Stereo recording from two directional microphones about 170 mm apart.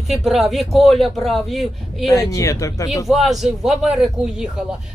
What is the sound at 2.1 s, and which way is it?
Speech, 20° left (ahead or behind).